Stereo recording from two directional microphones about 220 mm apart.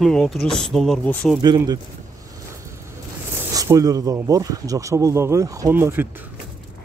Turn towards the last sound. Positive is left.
turn(degrees=-10)  # may be behind; listen again after turning